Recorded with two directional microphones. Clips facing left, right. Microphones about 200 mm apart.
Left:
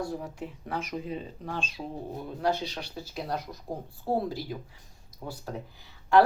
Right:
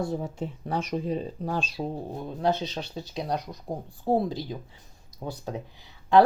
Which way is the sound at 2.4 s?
20° right (ahead or behind).